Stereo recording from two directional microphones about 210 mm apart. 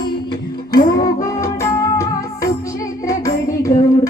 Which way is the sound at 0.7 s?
15° left (ahead or behind).